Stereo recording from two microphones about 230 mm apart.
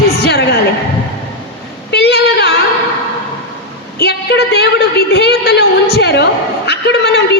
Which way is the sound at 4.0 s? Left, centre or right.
Left.